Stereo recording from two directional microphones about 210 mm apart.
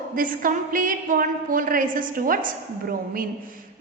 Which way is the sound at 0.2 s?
40° right (ahead or behind).